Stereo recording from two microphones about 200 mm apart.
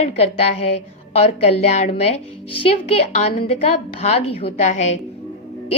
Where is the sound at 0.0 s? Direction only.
30° left (ahead or behind).